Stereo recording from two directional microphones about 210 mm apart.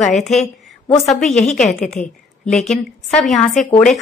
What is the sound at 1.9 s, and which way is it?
A woman's voice, 5° left (ahead or behind).